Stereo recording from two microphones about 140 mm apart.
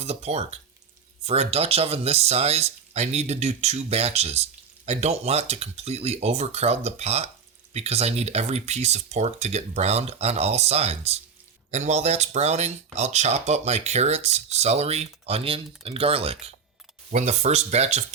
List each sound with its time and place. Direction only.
0.0 s speech: 50° right (ahead or behind)
17.1 s speech: 55° right (ahead or behind)